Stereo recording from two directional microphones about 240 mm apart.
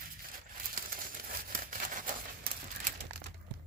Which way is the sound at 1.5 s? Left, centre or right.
Right.